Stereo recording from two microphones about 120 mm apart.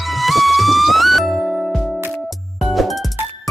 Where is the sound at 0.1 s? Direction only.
Centre (ahead or behind).